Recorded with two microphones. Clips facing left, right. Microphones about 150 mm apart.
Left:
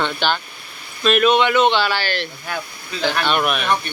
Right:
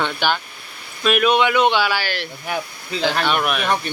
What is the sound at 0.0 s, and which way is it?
Speech, 10° right (ahead or behind).